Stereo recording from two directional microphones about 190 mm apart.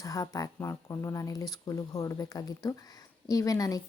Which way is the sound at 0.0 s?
15° left (ahead or behind).